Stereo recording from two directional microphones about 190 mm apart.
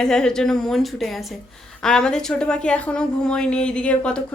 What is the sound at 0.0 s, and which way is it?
A woman's voice, 5° left (ahead or behind).